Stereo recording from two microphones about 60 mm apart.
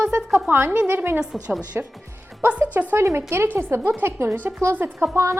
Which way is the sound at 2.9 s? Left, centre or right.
Right.